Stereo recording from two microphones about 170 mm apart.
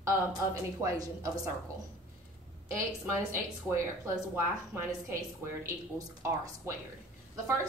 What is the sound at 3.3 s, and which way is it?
Speech, 15° right (ahead or behind).